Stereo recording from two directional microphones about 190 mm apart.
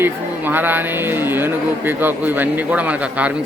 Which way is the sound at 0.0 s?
10° right (ahead or behind).